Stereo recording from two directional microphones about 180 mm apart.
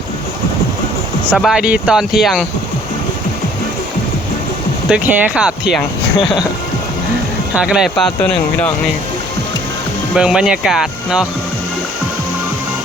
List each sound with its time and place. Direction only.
1.3 s speech: centre (ahead or behind)
4.9 s speech: 5° right (ahead or behind)
7.5 s speech: 5° right (ahead or behind)
10.2 s speech: 5° right (ahead or behind)